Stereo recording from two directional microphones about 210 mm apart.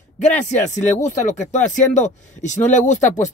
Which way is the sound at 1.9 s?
35° left (ahead or behind).